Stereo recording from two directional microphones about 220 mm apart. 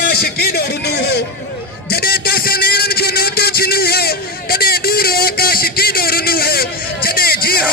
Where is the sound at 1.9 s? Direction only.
45° left (ahead or behind).